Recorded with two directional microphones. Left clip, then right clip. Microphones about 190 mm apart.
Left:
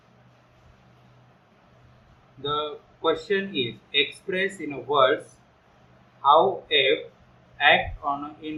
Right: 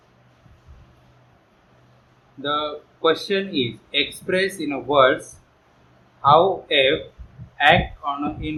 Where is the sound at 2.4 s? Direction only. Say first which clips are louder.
Right 4 dB; 35° right (ahead or behind).